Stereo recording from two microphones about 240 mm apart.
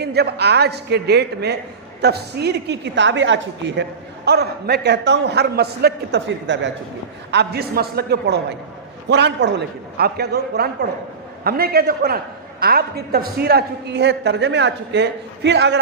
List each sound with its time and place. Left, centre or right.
0.0 s a man's voice: right